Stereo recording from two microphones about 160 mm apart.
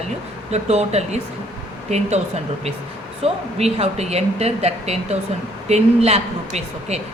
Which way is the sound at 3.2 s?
40° right (ahead or behind).